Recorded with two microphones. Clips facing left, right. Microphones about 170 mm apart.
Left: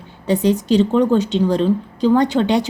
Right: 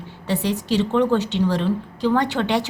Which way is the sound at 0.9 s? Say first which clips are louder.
Left 4 dB; 15° left (ahead or behind).